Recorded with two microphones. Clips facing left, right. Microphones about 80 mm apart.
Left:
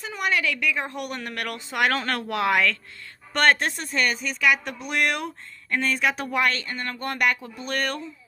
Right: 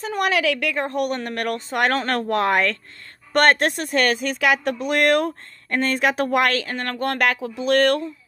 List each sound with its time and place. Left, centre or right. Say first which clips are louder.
0.1 s a woman's voice: right 5 dB; right
0.7 s speech: right 7 dB; right
3.6 s speech: right 5 dB; right
5.0 s speech: right 9 dB; right